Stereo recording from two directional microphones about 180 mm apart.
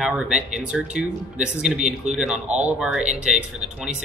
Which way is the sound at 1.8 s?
40° right (ahead or behind).